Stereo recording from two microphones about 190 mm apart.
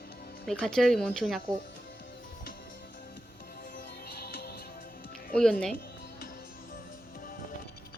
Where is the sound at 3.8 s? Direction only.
55° left (ahead or behind).